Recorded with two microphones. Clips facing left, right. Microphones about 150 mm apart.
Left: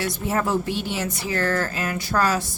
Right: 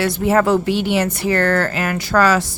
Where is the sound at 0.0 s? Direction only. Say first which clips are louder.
Right 8 dB; 85° right.